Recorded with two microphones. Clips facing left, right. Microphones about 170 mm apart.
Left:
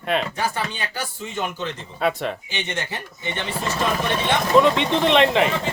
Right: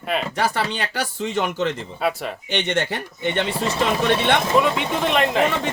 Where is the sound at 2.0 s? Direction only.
Centre (ahead or behind).